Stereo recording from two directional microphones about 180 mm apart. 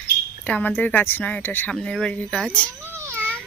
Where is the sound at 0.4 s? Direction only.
5° left (ahead or behind).